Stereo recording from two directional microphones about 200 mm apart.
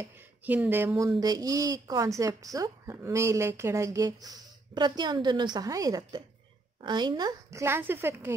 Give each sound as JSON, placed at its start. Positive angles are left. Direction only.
{"t": 0.0, "sound": "a woman's voice", "side_deg": -10}